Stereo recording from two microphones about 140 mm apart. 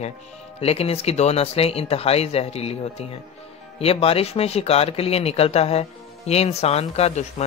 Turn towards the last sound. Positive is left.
turn(degrees=50)  # may be behind; listen again after turning